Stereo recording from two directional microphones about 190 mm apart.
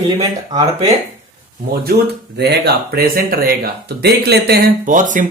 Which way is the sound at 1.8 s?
60° right (ahead or behind).